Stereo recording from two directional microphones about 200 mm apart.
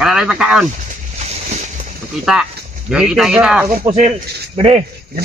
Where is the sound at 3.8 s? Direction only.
35° right (ahead or behind).